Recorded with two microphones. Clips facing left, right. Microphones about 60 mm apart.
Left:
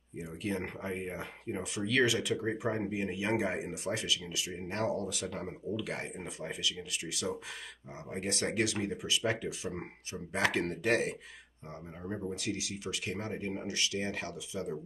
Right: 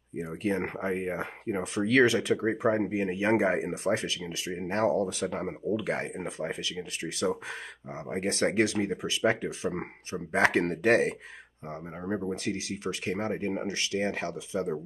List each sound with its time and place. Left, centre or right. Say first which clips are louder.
0.2 s speech: right 6 dB; right
12.3 s speech: right 5 dB; right